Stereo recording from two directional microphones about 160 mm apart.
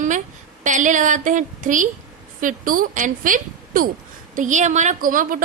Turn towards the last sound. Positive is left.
turn(degrees=-60)  # may be behind; listen again after turning